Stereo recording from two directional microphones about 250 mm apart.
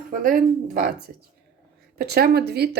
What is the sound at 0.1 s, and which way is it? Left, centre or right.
Speech, right.